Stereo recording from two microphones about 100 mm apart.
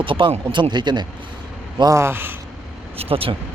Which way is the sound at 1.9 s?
25° right (ahead or behind).